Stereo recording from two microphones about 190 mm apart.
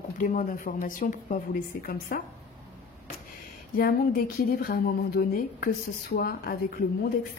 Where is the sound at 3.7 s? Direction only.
50° left (ahead or behind).